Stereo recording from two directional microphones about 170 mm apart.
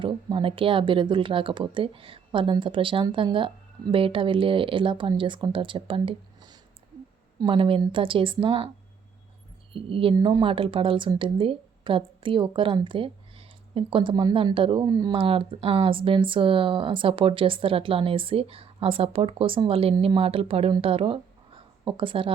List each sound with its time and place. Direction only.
0.0 s a woman's voice: 30° right (ahead or behind)
9.7 s a woman's voice: 30° right (ahead or behind)